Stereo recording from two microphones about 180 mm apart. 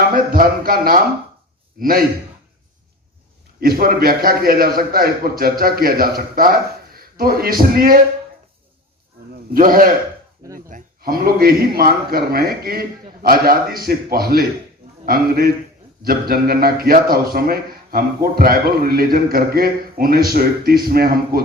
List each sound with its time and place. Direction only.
0.0 s a man's voice: 55° right (ahead or behind)
3.6 s a man's voice: 55° right (ahead or behind)
9.5 s a man's voice: 50° right (ahead or behind)